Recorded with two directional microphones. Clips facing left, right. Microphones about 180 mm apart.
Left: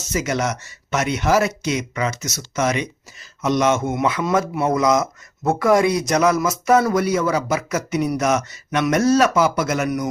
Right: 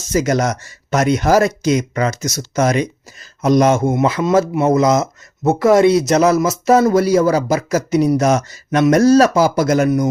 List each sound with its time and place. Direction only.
0.1 s speech: 40° right (ahead or behind)